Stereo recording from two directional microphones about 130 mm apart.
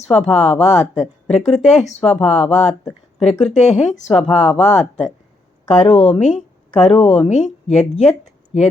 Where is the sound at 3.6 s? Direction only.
60° left (ahead or behind).